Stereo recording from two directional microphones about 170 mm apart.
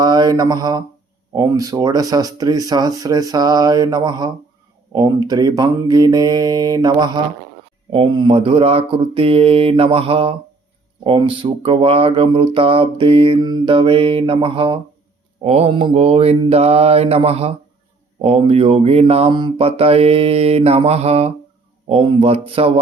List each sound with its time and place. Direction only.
0.0 s speech: 25° right (ahead or behind)